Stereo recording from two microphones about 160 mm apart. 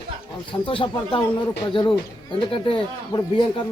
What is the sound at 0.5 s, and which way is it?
Speech, 35° left (ahead or behind).